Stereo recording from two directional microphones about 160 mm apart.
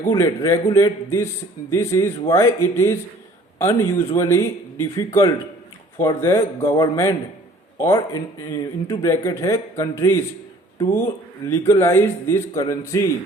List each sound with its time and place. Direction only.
0.1 s speech: 20° left (ahead or behind)
11.4 s speech: 15° left (ahead or behind)